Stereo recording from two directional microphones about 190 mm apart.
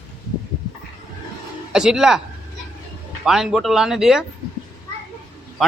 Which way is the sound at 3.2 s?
Centre (ahead or behind).